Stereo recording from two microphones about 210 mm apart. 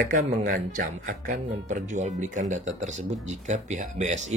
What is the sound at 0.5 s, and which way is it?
Speech, 40° right (ahead or behind).